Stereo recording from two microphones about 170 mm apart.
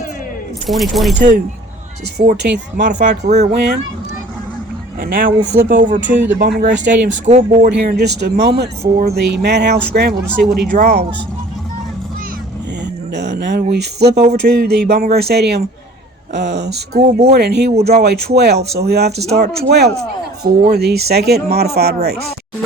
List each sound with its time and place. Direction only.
0.7 s speech: centre (ahead or behind)
2.2 s speech: 50° right (ahead or behind)
3.4 s speech: 75° right (ahead or behind)
4.9 s speech: 60° right (ahead or behind)
6.0 s speech: 90° right
6.8 s speech: 45° right (ahead or behind)
7.7 s speech: 75° right (ahead or behind)
12.8 s a sound: 85° right
14.3 s speech: 70° right (ahead or behind)
16.3 s speech: 85° right; by 22.2 s 70° right (ahead or behind)